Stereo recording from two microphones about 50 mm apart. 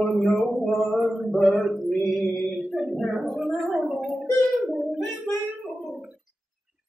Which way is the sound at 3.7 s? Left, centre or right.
Centre.